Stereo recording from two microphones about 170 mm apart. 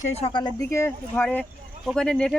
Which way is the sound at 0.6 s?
15° left (ahead or behind).